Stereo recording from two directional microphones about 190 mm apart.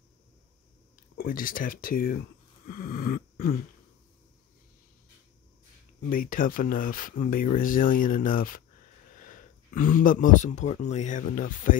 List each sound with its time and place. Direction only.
0.9 s speech: 50° left (ahead or behind)
2.7 s dog: 50° left (ahead or behind)
6.0 s speech: 45° left (ahead or behind)